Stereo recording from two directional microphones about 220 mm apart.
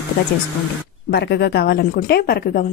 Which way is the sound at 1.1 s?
50° left (ahead or behind).